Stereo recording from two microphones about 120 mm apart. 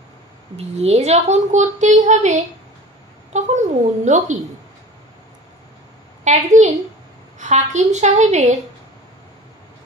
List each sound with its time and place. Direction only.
0.6 s a woman's voice: 60° right (ahead or behind); by 4.4 s 85° right
6.2 s a woman's voice: 80° right